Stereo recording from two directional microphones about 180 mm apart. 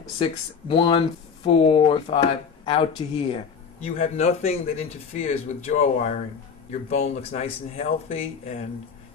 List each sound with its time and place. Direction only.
0.2 s speech: 30° left (ahead or behind)